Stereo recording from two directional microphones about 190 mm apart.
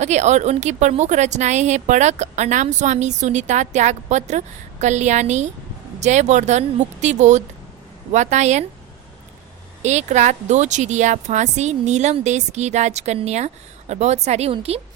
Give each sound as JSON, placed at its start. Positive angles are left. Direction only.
{"t": 0.0, "sound": "speech", "side_deg": -40}
{"t": 9.8, "sound": "speech", "side_deg": -35}